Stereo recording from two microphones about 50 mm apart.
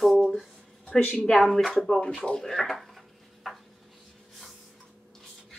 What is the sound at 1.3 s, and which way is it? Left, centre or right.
Speech, centre.